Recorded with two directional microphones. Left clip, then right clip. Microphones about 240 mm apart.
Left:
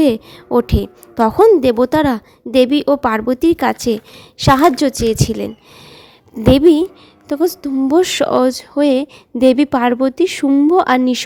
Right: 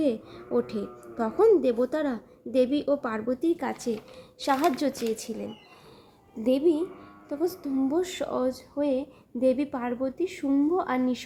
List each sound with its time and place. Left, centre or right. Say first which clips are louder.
0.0 s speech: left 13 dB; left